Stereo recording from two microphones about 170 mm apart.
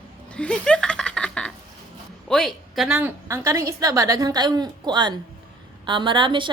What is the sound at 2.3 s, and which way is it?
Speech, centre (ahead or behind).